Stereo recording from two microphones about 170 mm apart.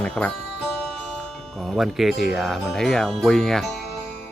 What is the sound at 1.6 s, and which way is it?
Speech, centre (ahead or behind).